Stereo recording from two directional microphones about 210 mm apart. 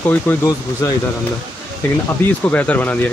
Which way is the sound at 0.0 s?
10° left (ahead or behind).